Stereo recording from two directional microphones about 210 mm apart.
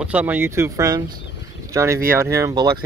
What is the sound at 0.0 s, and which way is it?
Speech, 5° right (ahead or behind).